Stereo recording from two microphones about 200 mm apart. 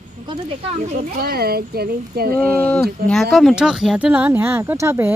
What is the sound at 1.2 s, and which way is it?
Speech, 50° right (ahead or behind).